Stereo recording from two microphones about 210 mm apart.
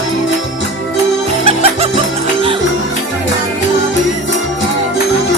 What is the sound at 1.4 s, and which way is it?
Music, 30° right (ahead or behind).